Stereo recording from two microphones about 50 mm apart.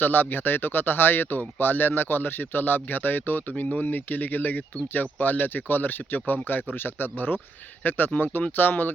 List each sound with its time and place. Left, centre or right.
0.0 s speech: left